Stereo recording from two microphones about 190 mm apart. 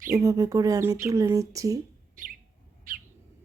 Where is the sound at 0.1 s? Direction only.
20° right (ahead or behind).